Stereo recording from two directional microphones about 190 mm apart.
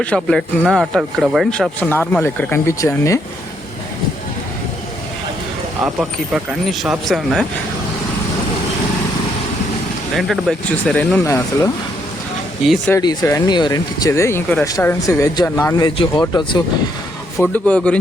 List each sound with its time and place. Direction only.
0.0 s speech: 5° left (ahead or behind)
5.8 s speech: 5° right (ahead or behind)
10.2 s speech: centre (ahead or behind)
11.2 s speech: 15° left (ahead or behind)
12.9 s speech: 15° left (ahead or behind)
16.2 s speech: 20° left (ahead or behind)
17.4 s speech: 5° left (ahead or behind)